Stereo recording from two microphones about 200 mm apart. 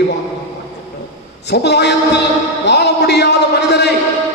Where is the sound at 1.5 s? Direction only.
55° left (ahead or behind).